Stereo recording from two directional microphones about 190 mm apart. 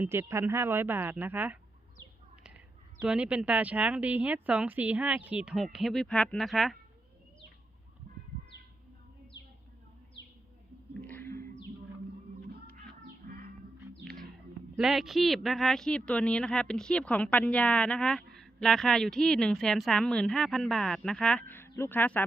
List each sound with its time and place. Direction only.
0.0 s speech: 10° right (ahead or behind)
3.0 s speech: 5° right (ahead or behind)
11.0 s whale vocalization: 10° left (ahead or behind)
13.3 s music: 50° right (ahead or behind)
14.0 s music: centre (ahead or behind)
14.8 s speech: centre (ahead or behind)